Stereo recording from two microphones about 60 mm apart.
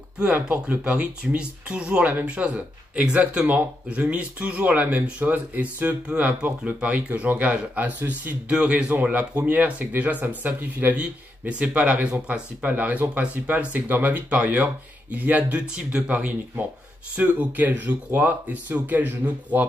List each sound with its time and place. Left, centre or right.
0.2 s speech: centre
15.7 s speech: centre